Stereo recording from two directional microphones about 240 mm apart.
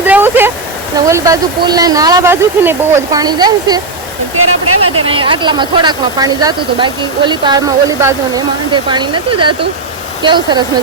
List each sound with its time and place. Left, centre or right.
0.0 s a sound: centre
0.9 s speech: centre
4.4 s speech: right
5.0 s speech: right